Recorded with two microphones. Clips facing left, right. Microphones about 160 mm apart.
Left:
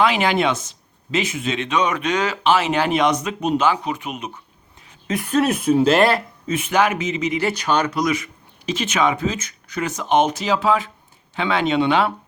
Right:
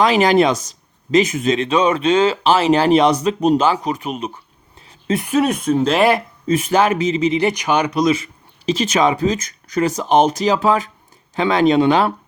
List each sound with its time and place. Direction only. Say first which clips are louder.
0.0 s speech: right 5 dB; 40° right (ahead or behind)
5.0 s speech: right 4 dB; 25° right (ahead or behind)
5.3 s speech: even; centre (ahead or behind)
6.0 s speech: right 2 dB; 15° right (ahead or behind)
6.5 s speech: right 4 dB; 35° right (ahead or behind)